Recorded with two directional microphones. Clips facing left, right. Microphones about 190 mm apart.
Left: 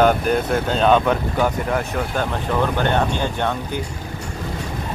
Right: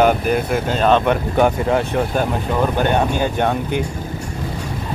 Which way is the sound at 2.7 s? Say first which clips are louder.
Right 2 dB; 15° right (ahead or behind).